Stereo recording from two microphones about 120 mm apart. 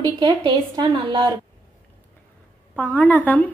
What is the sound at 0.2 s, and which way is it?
A woman's voice, 40° right (ahead or behind).